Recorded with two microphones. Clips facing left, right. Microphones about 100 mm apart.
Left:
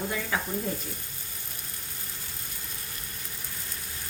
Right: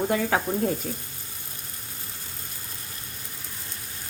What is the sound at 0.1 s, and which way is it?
Speech, 60° right (ahead or behind).